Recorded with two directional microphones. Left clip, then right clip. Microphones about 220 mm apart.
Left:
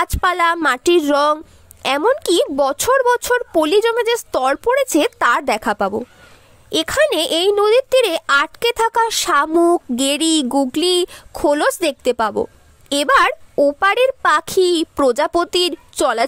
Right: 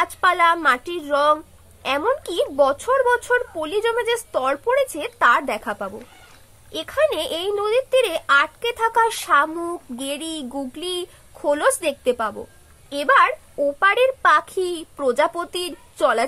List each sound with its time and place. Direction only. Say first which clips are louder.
0.0 s a woman's voice: left 1 dB; 45° left (ahead or behind)